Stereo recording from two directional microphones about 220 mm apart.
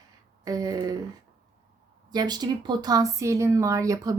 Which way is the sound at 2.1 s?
20° right (ahead or behind).